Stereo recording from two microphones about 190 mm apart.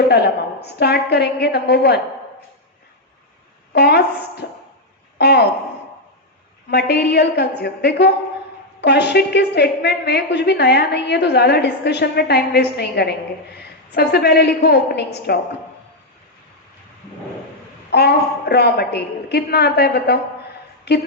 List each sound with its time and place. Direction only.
0.1 s a woman's voice: 60° left (ahead or behind)
3.7 s a woman's voice: 60° left (ahead or behind)
6.7 s a woman's voice: 60° left (ahead or behind)
17.9 s a woman's voice: 60° left (ahead or behind)